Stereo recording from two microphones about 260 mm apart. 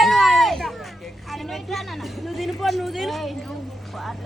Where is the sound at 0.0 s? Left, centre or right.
Centre.